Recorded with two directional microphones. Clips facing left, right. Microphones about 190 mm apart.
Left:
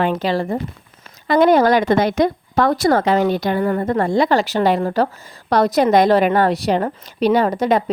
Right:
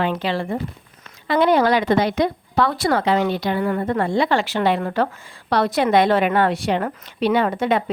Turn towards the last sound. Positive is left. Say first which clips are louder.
# left 3 dB
turn(degrees=40)  # may be behind; listen again after turning